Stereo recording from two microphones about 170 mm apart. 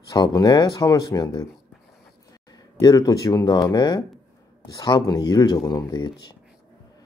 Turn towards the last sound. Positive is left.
turn(degrees=25)  # may be behind; listen again after turning